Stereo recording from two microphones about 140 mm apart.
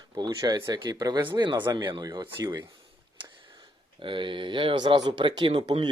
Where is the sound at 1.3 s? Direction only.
35° right (ahead or behind).